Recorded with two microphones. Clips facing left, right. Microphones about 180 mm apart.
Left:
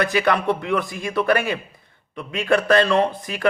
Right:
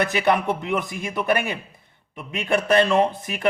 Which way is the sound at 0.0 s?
20° right (ahead or behind).